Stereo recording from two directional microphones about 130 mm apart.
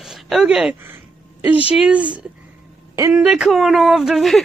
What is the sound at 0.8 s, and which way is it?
Speech, 15° right (ahead or behind).